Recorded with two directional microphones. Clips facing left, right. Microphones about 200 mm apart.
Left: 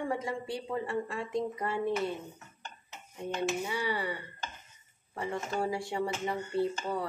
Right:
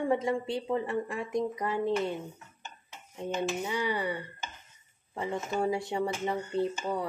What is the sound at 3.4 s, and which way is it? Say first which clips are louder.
Speech: right 1 dB; 20° right (ahead or behind).